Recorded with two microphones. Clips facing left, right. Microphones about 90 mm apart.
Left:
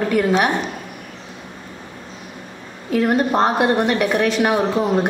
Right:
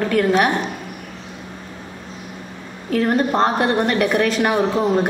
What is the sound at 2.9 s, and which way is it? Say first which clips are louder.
A woman's voice: left 1 dB; 10° left (ahead or behind).